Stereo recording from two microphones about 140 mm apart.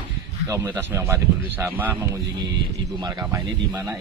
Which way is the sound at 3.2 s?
15° right (ahead or behind).